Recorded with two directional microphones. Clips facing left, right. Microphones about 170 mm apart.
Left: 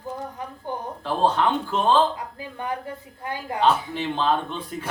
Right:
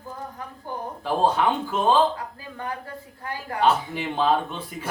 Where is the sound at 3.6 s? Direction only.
10° right (ahead or behind).